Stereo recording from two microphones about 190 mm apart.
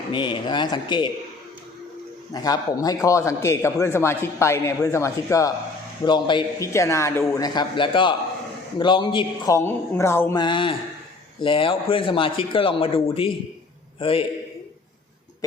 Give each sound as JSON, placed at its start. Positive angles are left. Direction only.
{"t": 0.1, "sound": "a man's voice", "side_deg": 25}
{"t": 2.3, "sound": "a man's voice", "side_deg": 20}
{"t": 9.6, "sound": "a man's voice", "side_deg": 15}
{"t": 10.4, "sound": "a man's voice", "side_deg": 25}